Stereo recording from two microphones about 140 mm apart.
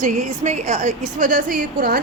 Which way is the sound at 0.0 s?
55° right (ahead or behind).